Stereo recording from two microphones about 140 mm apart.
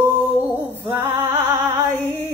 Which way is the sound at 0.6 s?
15° right (ahead or behind).